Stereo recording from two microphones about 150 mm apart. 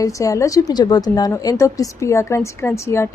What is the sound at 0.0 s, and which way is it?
A woman's voice, 20° left (ahead or behind).